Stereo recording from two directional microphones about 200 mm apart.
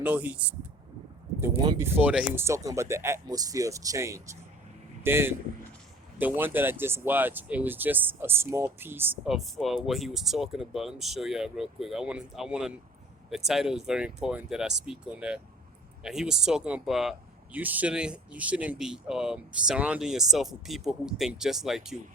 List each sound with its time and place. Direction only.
0.0 s speech: 5° right (ahead or behind)
1.6 s speech: 20° right (ahead or behind)
2.0 s speech: 5° right (ahead or behind)